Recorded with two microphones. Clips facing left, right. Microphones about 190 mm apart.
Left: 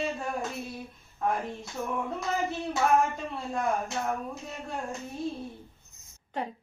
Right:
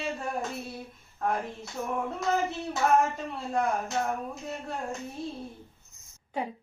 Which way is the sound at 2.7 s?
Centre (ahead or behind).